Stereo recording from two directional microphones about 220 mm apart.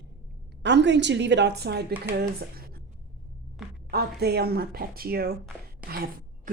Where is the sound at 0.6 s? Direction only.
50° right (ahead or behind).